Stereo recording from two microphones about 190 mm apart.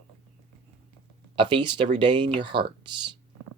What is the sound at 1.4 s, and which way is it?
Speech, 25° right (ahead or behind).